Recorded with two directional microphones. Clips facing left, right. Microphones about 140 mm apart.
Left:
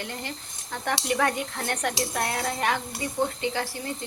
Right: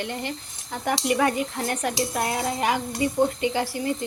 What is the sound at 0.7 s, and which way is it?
Speech, 10° right (ahead or behind).